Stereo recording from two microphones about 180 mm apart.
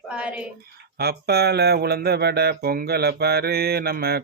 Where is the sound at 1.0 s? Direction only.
60° right (ahead or behind).